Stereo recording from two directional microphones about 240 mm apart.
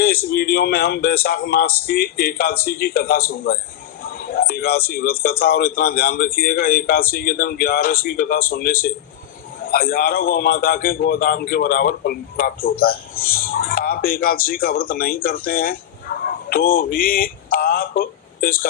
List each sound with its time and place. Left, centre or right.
0.3 s a man's voice: left